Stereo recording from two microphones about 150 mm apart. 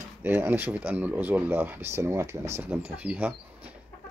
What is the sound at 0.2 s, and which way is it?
Speech, 15° right (ahead or behind).